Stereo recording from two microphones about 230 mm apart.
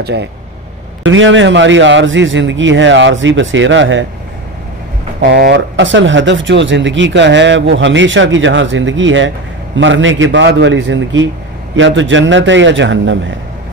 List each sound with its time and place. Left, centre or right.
0.0 s speech: right
5.2 s speech: right